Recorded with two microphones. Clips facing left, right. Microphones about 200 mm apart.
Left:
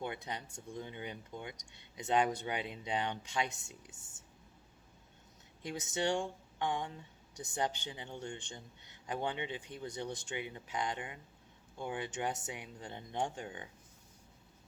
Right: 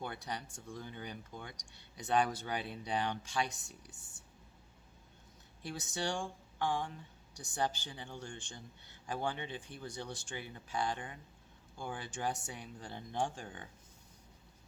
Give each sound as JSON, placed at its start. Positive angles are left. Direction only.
{"t": 0.0, "sound": "a man's voice", "side_deg": 20}
{"t": 5.6, "sound": "a man's voice", "side_deg": 20}